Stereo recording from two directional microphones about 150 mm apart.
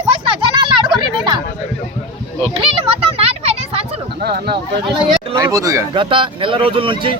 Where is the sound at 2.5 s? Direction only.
40° right (ahead or behind).